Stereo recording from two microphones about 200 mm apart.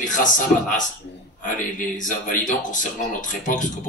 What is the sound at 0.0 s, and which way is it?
Speech, 40° left (ahead or behind).